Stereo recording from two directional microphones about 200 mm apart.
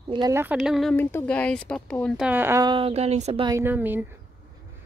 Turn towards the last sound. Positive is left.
turn(degrees=-10)  # may be behind; listen again after turning